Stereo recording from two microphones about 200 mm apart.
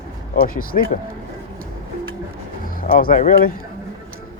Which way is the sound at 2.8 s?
45° left (ahead or behind).